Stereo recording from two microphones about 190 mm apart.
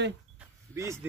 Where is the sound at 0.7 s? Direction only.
15° right (ahead or behind).